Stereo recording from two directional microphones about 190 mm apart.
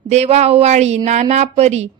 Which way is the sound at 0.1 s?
35° right (ahead or behind).